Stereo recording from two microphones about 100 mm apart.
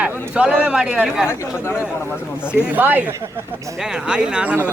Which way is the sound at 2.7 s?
15° right (ahead or behind).